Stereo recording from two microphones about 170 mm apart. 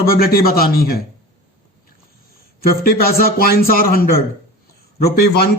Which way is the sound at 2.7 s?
60° left (ahead or behind).